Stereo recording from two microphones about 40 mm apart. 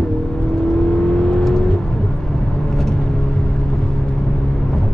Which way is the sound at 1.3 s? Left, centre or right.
Centre.